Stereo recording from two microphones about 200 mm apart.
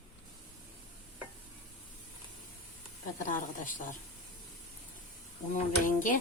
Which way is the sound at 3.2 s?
40° left (ahead or behind).